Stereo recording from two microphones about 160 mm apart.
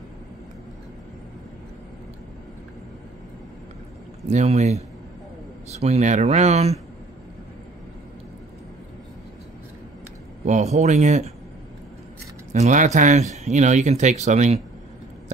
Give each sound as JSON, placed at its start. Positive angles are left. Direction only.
{"t": 4.3, "sound": "speech", "side_deg": -45}
{"t": 10.4, "sound": "speech", "side_deg": -45}
{"t": 12.5, "sound": "speech", "side_deg": -45}